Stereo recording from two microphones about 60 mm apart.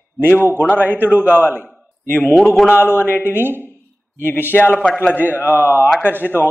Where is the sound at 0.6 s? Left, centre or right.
Left.